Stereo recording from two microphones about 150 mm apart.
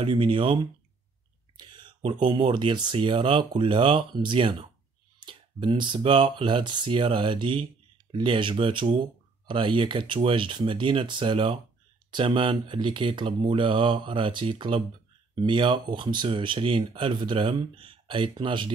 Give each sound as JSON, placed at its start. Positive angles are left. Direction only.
{"t": 0.0, "sound": "speech", "side_deg": -35}